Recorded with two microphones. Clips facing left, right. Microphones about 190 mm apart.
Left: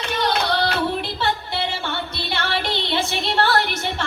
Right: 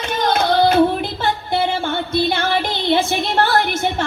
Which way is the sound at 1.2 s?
50° right (ahead or behind).